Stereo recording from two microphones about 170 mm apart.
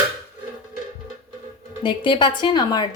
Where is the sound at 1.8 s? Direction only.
30° left (ahead or behind).